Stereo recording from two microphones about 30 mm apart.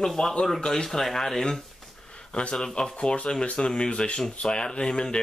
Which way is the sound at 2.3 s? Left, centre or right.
Left.